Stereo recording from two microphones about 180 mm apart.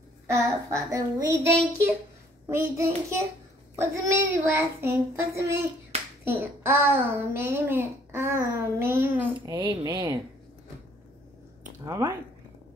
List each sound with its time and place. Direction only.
0.3 s a child's voice: 15° right (ahead or behind)
11.8 s a child's voice: 15° right (ahead or behind)